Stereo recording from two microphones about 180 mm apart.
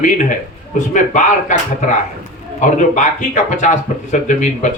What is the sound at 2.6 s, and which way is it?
Speech, 45° left (ahead or behind).